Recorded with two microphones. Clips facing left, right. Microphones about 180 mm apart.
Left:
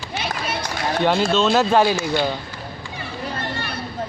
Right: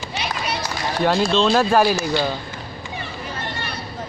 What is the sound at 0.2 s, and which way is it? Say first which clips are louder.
Run: even; 50° left (ahead or behind).